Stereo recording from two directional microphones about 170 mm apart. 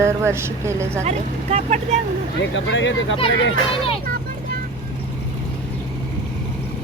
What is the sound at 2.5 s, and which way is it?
Speech, 90° left.